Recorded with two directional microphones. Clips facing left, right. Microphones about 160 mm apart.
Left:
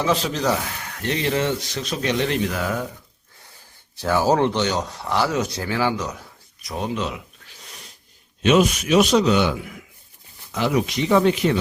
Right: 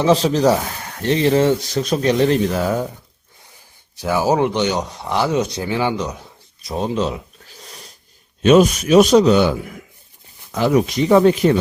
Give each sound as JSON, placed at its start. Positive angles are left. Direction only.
{"t": 0.0, "sound": "speech", "side_deg": -35}
{"t": 3.9, "sound": "speech", "side_deg": -15}